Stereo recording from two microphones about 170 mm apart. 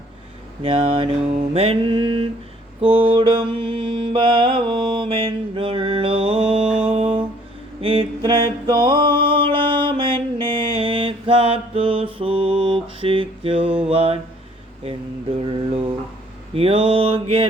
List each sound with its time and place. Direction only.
0.6 s mantra: 35° right (ahead or behind)
6.7 s music: 35° right (ahead or behind)
7.8 s mantra: 30° right (ahead or behind)
15.4 s mantra: 30° right (ahead or behind)